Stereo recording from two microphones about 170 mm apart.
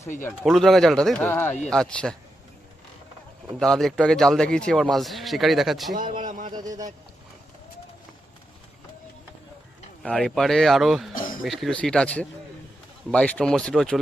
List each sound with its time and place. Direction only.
0.4 s a man's voice: centre (ahead or behind)
3.6 s a man's voice: centre (ahead or behind)
5.9 s a sound: 50° right (ahead or behind)
6.5 s speech: 20° right (ahead or behind)
10.0 s a man's voice: centre (ahead or behind)